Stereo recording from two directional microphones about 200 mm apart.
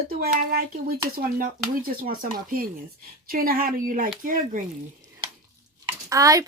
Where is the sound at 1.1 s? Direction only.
45° right (ahead or behind).